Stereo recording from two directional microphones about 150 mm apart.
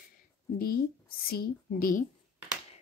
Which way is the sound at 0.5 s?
75° left (ahead or behind).